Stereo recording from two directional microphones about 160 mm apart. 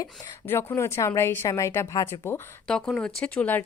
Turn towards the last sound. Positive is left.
turn(degrees=10)  # may be behind; listen again after turning